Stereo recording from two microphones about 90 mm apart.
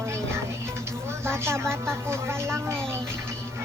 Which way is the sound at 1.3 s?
25° right (ahead or behind).